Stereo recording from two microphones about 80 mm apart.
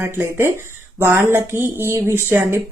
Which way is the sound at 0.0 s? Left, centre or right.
Right.